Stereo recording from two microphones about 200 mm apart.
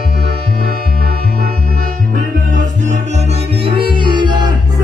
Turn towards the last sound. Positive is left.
turn(degrees=-20)  # may be behind; listen again after turning